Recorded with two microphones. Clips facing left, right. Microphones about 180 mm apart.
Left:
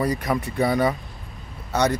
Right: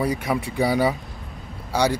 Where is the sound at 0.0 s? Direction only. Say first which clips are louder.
Even; 5° right (ahead or behind).